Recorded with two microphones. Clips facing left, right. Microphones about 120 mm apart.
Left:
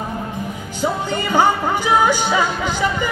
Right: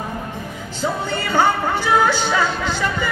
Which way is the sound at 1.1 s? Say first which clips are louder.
Left 1 dB; 15° left (ahead or behind).